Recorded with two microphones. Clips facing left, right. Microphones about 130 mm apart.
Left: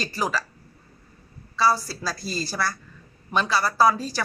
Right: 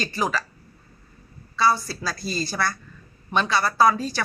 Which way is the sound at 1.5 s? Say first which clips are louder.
Even; 5° left (ahead or behind).